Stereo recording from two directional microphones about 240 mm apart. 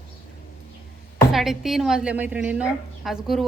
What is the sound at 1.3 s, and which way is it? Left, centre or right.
A woman's voice, centre.